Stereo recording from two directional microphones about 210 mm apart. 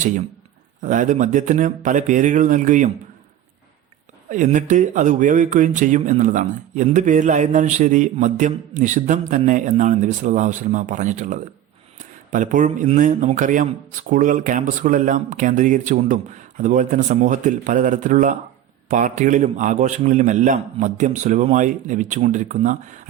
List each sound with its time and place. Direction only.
0.8 s speech: 35° right (ahead or behind)
4.3 s speech: 35° right (ahead or behind)